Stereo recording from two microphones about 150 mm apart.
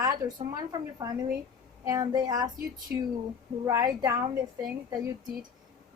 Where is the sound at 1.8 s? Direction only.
25° right (ahead or behind).